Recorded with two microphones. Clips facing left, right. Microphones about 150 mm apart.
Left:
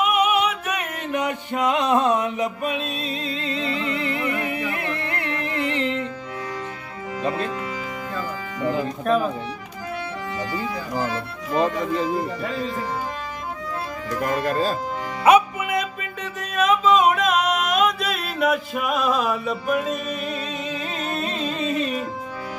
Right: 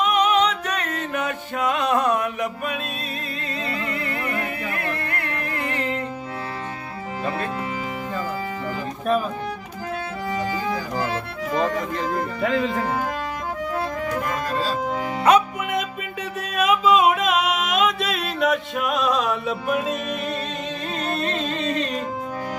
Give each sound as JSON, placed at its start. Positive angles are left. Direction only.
{"t": 0.0, "sound": "music", "side_deg": 10}
{"t": 11.5, "sound": "speech", "side_deg": 5}
{"t": 12.1, "sound": "speech", "side_deg": -50}
{"t": 12.4, "sound": "speech", "side_deg": -90}
{"t": 14.2, "sound": "speech", "side_deg": 50}
{"t": 15.3, "sound": "music", "side_deg": 10}
{"t": 15.7, "sound": "music", "side_deg": -5}
{"t": 21.2, "sound": "music", "side_deg": 5}